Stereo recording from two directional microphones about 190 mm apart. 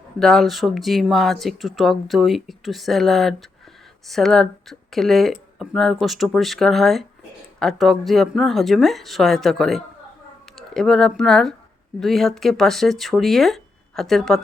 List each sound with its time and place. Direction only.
0.2 s speech: centre (ahead or behind)